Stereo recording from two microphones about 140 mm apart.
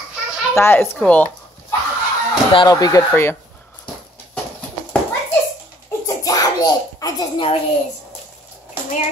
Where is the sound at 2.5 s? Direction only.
30° left (ahead or behind).